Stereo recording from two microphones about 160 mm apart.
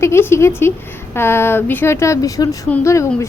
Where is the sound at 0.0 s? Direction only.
15° left (ahead or behind).